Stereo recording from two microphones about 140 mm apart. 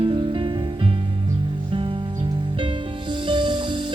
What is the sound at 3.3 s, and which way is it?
Music, 35° right (ahead or behind).